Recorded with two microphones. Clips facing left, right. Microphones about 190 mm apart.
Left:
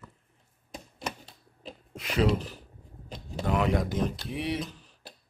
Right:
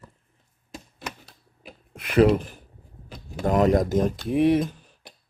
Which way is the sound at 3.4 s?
40° right (ahead or behind).